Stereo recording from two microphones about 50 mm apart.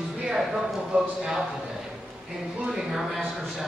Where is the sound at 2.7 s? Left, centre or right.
Centre.